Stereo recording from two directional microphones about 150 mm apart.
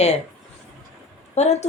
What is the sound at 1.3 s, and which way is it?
Speech, 50° left (ahead or behind).